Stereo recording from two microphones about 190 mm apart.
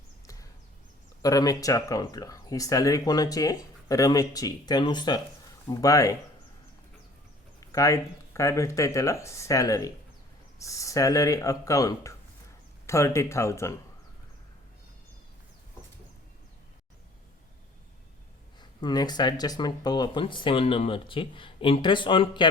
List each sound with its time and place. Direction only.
1.2 s speech: 20° left (ahead or behind)
7.6 s speech: 15° left (ahead or behind)
18.8 s speech: 20° left (ahead or behind)